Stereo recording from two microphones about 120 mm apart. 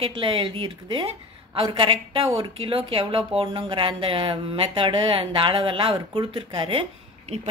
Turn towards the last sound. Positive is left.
turn(degrees=-55)  # may be behind; listen again after turning